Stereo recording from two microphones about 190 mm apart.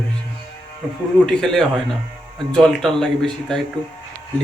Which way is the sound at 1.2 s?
Centre (ahead or behind).